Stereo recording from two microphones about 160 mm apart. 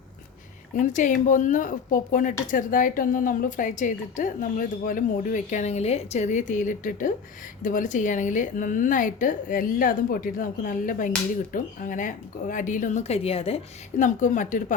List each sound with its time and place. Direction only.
0.8 s a woman's voice: 55° left (ahead or behind)
13.9 s speech: 50° left (ahead or behind)